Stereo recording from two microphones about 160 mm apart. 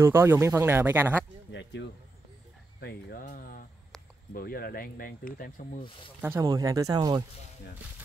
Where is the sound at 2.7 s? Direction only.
70° left (ahead or behind).